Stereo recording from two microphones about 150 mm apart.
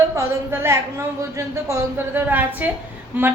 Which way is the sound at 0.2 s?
20° right (ahead or behind).